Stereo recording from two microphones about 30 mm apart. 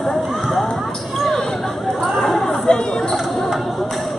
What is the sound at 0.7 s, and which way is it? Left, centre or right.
Basketball bounce, centre.